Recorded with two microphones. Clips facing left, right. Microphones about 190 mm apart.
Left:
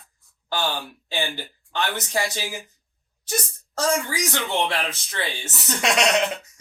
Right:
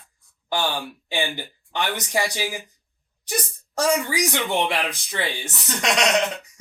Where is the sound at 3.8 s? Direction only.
15° right (ahead or behind).